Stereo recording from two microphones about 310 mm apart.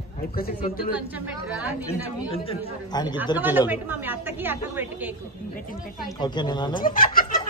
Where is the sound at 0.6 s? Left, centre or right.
Centre.